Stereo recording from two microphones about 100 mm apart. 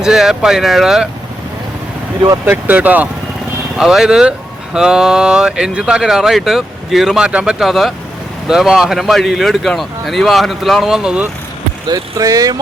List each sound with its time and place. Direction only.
0.0 s a man's voice: 5° right (ahead or behind)
2.5 s speech: 15° right (ahead or behind)
3.8 s a man's voice: 5° right (ahead or behind)
11.9 s speech: 35° right (ahead or behind)